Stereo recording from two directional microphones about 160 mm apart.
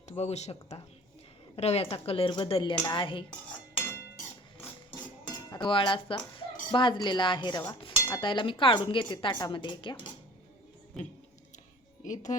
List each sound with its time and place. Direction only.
0.2 s speech: 45° left (ahead or behind)
1.5 s dishes: 40° left (ahead or behind)
5.5 s speech: 30° left (ahead or behind)
7.7 s dishes: 30° left (ahead or behind)
12.0 s speech: 50° left (ahead or behind)